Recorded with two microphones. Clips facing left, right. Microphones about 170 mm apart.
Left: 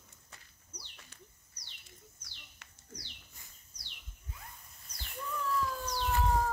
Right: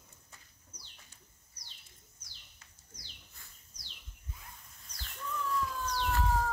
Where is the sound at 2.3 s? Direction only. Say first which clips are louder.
Left 4 dB; 70° left (ahead or behind).